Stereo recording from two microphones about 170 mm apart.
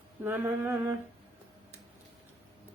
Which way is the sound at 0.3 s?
15° right (ahead or behind).